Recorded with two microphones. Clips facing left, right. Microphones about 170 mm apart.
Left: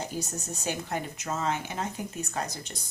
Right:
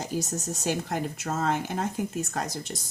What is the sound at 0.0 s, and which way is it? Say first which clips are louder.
Speech: right 4 dB; 45° right (ahead or behind).